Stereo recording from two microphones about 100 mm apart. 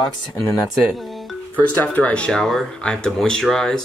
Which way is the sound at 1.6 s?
15° left (ahead or behind).